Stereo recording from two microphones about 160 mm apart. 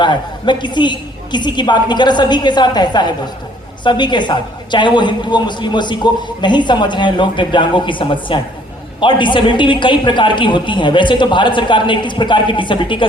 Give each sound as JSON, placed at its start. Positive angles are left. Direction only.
{"t": 0.0, "sound": "a woman's voice", "side_deg": 30}